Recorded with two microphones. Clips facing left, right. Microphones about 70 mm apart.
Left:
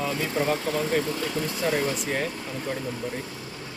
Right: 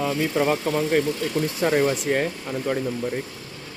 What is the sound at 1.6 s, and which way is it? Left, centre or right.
Speech, right.